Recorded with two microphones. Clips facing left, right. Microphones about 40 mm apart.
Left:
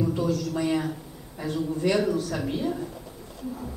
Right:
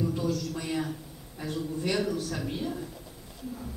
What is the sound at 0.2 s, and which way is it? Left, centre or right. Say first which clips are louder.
Speech: left 5 dB; left.